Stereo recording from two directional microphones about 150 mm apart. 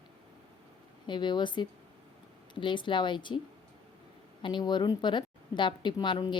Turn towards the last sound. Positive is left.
turn(degrees=30)  # may be behind; listen again after turning